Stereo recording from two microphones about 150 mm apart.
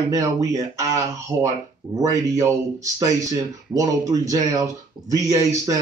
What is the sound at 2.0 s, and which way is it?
Speech, 20° right (ahead or behind).